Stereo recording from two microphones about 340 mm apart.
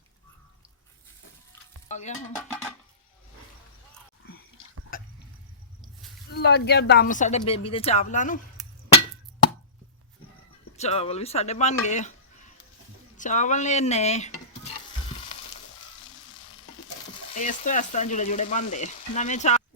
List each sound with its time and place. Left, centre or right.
1.9 s stir: left
4.2 s whispering: left
4.9 s a sound: left
6.3 s frying: left
8.6 s chink: centre
10.8 s frying: centre
13.1 s frying: left
17.3 s frying: left